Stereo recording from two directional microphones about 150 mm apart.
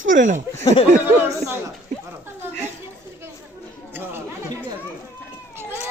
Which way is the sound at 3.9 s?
15° right (ahead or behind).